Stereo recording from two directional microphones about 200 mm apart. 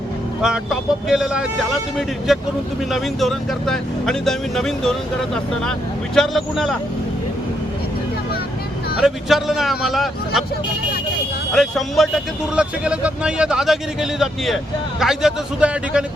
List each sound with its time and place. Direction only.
0.4 s speech: centre (ahead or behind)
9.0 s speech: centre (ahead or behind)
11.5 s speech: centre (ahead or behind)